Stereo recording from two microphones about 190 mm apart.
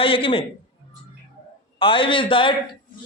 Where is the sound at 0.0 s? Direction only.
30° left (ahead or behind).